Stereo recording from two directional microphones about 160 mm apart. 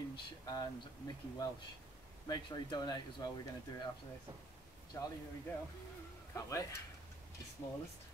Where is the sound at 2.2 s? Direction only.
25° left (ahead or behind).